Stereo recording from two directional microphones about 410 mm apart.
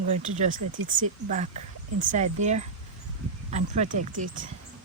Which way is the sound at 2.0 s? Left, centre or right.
Centre.